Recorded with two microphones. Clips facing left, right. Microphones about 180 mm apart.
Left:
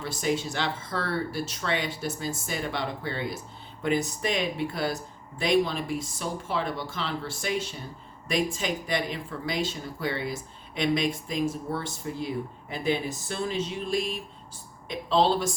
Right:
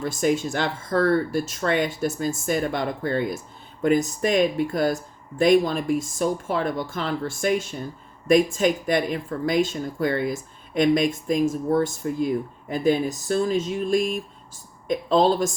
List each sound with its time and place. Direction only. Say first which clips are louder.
0.0 s speech: right 6 dB; 50° right (ahead or behind)